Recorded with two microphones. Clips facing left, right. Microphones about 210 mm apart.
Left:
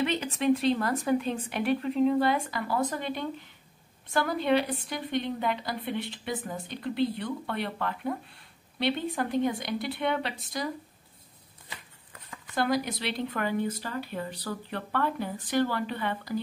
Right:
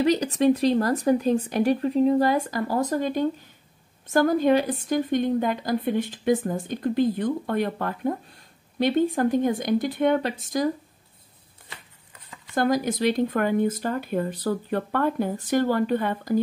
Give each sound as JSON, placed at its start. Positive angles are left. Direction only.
{"t": 0.0, "sound": "a woman's voice", "side_deg": -40}
{"t": 12.5, "sound": "a woman's voice", "side_deg": -45}